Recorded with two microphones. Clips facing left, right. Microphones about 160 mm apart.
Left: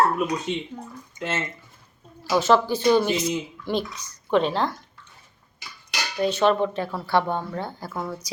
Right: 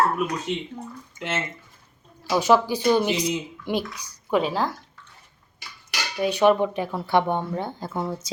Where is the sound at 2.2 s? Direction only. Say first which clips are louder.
Even; 15° right (ahead or behind).